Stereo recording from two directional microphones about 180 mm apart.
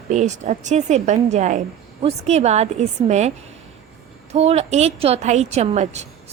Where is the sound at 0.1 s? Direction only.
40° right (ahead or behind).